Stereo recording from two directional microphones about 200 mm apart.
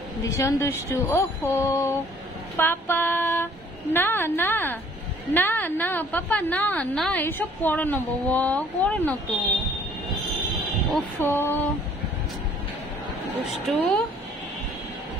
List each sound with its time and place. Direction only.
0.2 s a woman's voice: 15° left (ahead or behind)
11.1 s a woman's voice: 10° left (ahead or behind)
13.5 s a woman's voice: centre (ahead or behind)